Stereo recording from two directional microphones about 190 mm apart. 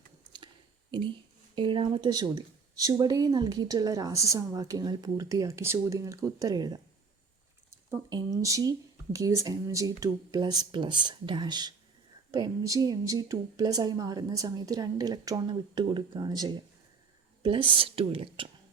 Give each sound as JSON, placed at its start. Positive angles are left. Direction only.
{"t": 0.3, "sound": "a sound", "side_deg": -25}
{"t": 1.5, "sound": "speech", "side_deg": -25}
{"t": 7.9, "sound": "speech", "side_deg": -15}